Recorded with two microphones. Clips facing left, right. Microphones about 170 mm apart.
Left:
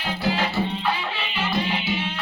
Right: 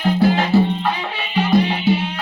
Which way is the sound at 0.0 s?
50° right (ahead or behind).